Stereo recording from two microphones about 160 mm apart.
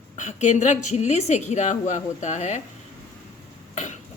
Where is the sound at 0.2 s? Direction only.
50° left (ahead or behind).